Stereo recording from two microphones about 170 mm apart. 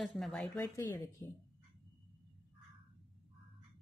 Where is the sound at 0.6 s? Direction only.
15° left (ahead or behind).